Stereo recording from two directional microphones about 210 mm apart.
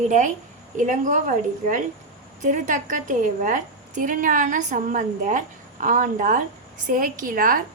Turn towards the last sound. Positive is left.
turn(degrees=-40)  # may be behind; listen again after turning